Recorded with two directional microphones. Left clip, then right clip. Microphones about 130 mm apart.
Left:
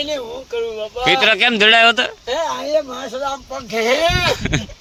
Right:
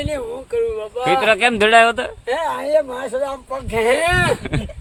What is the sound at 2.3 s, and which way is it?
Speech, 40° right (ahead or behind).